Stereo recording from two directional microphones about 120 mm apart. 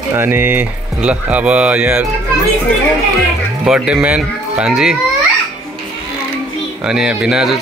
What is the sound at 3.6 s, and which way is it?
Speech, 5° right (ahead or behind).